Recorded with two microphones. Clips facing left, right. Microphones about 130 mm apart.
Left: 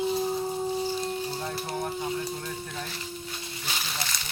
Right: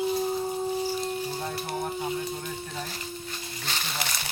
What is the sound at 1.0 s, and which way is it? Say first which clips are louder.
Music: even; centre (ahead or behind).